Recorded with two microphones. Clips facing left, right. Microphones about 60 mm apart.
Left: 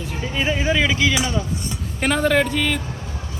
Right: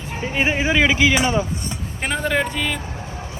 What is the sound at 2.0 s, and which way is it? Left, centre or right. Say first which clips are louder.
Speech: left 3 dB; centre.